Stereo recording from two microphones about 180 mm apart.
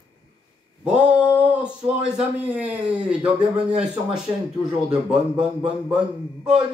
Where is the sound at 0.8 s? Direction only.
5° right (ahead or behind).